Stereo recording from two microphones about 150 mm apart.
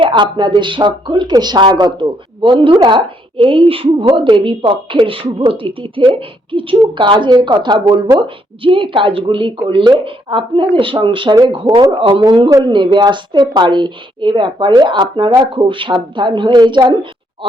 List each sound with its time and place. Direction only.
0.0 s a woman's voice: 30° right (ahead or behind)